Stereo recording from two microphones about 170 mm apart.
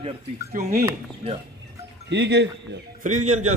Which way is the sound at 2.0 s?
90° right.